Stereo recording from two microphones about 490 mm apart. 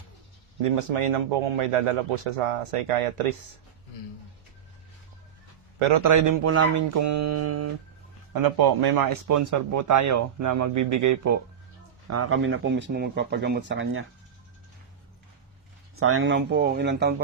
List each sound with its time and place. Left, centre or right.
0.8 s speech: right
6.0 s speech: right
8.3 s speech: right
16.0 s speech: right